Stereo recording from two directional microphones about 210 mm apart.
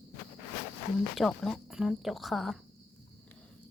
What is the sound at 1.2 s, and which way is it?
Speech, centre (ahead or behind).